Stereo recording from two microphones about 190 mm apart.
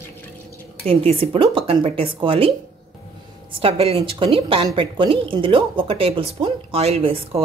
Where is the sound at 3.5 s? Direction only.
30° right (ahead or behind).